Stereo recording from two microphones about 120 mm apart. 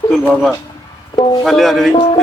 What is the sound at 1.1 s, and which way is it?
Speech, 35° left (ahead or behind).